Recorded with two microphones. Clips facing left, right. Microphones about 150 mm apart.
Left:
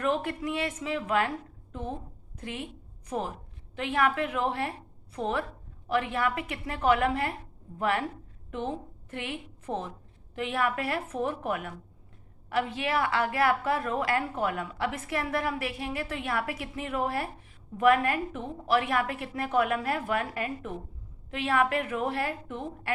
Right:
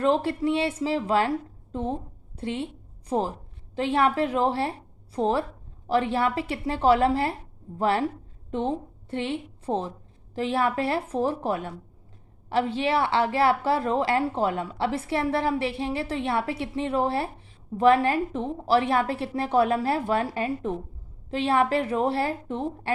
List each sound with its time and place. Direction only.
0.0 s a woman's voice: 30° right (ahead or behind)